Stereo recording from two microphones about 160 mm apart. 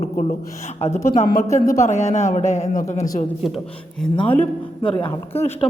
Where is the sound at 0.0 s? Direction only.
45° left (ahead or behind).